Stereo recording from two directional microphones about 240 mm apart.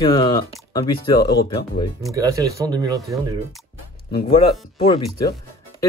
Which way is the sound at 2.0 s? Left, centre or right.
Centre.